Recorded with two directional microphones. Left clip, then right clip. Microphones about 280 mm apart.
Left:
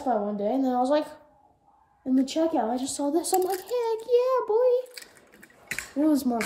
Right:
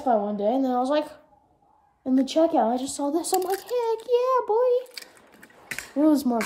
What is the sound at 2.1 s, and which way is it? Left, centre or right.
Speech, centre.